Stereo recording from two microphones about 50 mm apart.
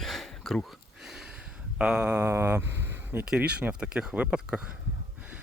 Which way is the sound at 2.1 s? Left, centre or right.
Right.